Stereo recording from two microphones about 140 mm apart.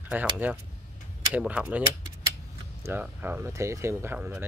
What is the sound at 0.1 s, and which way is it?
Speech, 15° right (ahead or behind).